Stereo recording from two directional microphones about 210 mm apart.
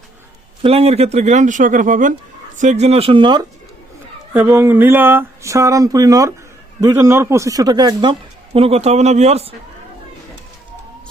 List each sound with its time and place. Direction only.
0.6 s a man's voice: 25° right (ahead or behind)
4.4 s a man's voice: 10° right (ahead or behind); by 9.6 s 30° right (ahead or behind)